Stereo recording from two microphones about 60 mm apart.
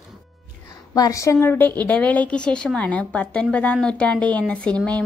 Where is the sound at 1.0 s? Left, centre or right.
Left.